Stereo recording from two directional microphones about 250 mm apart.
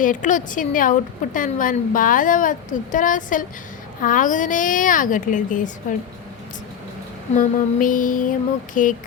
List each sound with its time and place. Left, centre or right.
0.0 s a woman's voice: left
7.3 s a woman's voice: left